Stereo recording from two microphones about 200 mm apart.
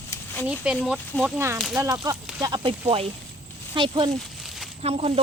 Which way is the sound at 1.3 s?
10° right (ahead or behind).